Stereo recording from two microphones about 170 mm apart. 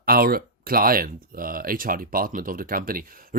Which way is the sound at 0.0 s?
60° right (ahead or behind).